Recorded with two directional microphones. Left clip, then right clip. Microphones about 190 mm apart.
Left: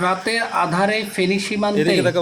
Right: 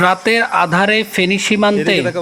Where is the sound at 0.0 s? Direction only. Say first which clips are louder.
Right 7 dB; 35° right (ahead or behind).